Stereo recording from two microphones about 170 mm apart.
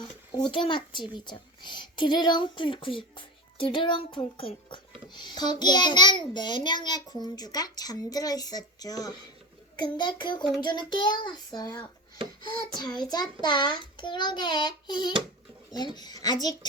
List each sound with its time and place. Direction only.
0.0 s a child's voice: 25° left (ahead or behind)